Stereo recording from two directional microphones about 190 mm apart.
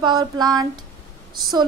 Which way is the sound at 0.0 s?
20° right (ahead or behind).